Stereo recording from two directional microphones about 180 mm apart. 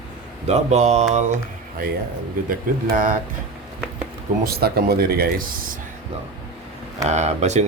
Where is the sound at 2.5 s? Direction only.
50° right (ahead or behind).